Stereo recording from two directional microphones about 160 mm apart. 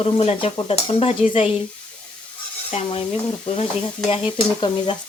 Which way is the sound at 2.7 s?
35° left (ahead or behind).